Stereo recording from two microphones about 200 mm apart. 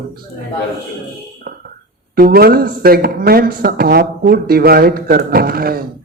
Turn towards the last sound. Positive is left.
turn(degrees=-50)  # may be behind; listen again after turning